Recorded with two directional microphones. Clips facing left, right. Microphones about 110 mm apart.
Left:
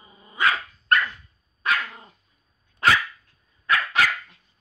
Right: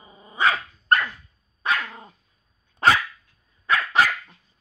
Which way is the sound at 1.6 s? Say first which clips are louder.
Even; 20° right (ahead or behind).